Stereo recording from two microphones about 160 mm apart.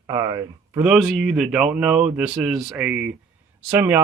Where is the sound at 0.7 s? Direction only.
5° right (ahead or behind).